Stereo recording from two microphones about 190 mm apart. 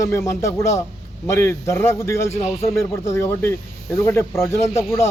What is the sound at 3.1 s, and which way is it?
A man's voice, 10° left (ahead or behind).